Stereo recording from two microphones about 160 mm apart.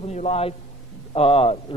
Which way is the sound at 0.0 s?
40° left (ahead or behind).